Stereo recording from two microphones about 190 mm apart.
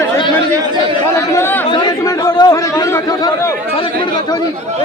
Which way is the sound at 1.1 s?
15° left (ahead or behind).